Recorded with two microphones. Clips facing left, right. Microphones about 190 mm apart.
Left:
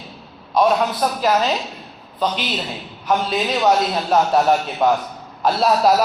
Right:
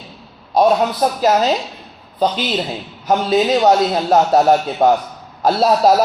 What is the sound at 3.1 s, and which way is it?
A man's voice, 35° right (ahead or behind).